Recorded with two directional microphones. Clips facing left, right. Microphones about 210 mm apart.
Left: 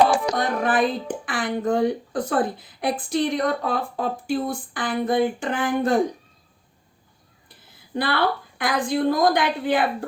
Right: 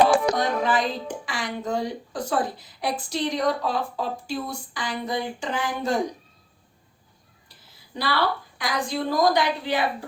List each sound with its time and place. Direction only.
0.3 s speech: 55° left (ahead or behind)
7.4 s a woman's voice: 55° left (ahead or behind)